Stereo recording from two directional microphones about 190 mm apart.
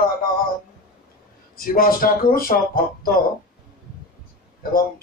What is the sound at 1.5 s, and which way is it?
Speech, 50° left (ahead or behind).